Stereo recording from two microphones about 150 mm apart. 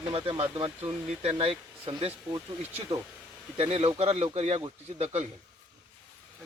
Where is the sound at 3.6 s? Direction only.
40° right (ahead or behind).